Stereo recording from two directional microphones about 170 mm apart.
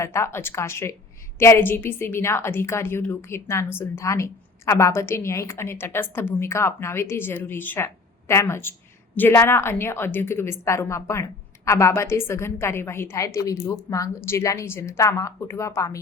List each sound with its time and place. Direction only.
0.0 s a woman's voice: 15° left (ahead or behind)